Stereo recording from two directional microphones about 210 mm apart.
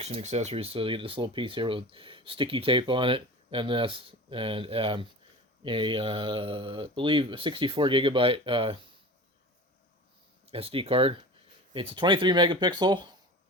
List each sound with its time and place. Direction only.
0.0 s speech: 30° right (ahead or behind)
10.4 s speech: 25° right (ahead or behind)